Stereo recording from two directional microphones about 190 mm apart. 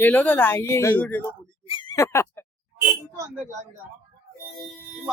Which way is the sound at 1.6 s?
25° left (ahead or behind).